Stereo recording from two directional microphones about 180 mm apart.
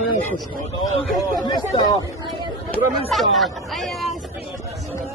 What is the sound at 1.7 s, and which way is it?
Speech, 20° left (ahead or behind).